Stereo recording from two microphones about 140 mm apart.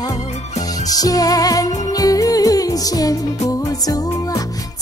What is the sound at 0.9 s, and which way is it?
Music, 25° left (ahead or behind).